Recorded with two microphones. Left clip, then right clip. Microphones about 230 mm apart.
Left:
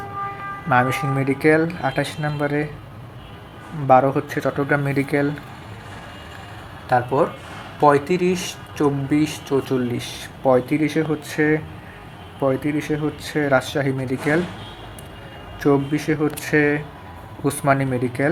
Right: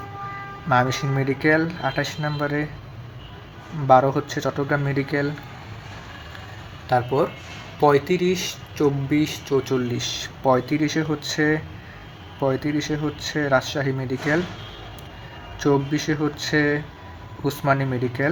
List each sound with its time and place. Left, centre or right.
1.1 s speech: centre
3.8 s speech: centre
6.9 s speech: centre
9.6 s speech: centre
15.6 s speech: centre